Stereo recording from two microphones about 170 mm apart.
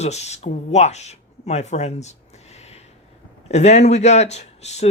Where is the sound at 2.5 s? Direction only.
40° left (ahead or behind).